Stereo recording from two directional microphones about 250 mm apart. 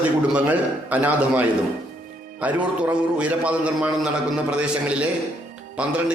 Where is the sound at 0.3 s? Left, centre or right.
Centre.